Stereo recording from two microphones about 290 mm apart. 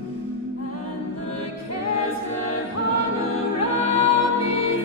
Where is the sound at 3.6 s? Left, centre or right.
Left.